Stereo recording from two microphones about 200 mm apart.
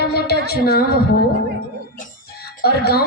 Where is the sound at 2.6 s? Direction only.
50° left (ahead or behind).